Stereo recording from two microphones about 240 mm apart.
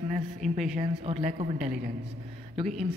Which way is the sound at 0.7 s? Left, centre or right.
Right.